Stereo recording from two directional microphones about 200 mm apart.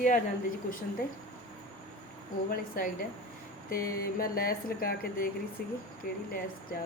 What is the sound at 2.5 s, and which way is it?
Speech, 45° left (ahead or behind).